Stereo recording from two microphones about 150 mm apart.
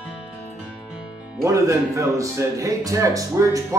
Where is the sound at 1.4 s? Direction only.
20° right (ahead or behind).